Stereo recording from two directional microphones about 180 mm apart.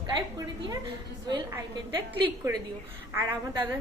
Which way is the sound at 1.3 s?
25° right (ahead or behind).